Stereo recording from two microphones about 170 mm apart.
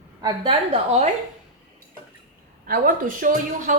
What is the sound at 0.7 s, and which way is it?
Speech, 40° right (ahead or behind).